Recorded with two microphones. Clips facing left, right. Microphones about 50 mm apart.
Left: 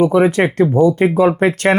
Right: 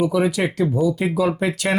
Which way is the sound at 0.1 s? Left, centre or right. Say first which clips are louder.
Left 7 dB; left.